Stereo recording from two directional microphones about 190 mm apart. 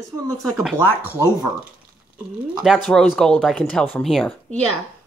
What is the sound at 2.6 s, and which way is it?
Speech, centre (ahead or behind).